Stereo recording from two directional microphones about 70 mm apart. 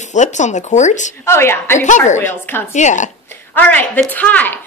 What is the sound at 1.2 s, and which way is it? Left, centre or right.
A woman's voice, left.